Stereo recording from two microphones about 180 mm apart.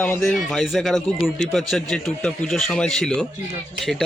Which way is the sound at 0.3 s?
Centre (ahead or behind).